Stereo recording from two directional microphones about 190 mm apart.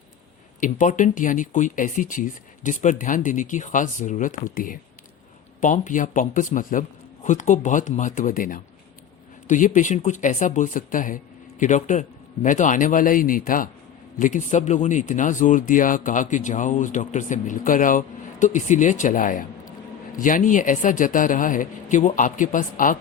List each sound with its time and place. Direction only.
0.6 s speech: 45° left (ahead or behind)